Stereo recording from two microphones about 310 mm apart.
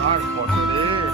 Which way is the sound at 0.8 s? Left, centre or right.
Centre.